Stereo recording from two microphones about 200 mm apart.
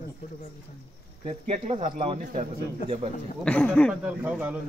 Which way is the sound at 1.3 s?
35° right (ahead or behind).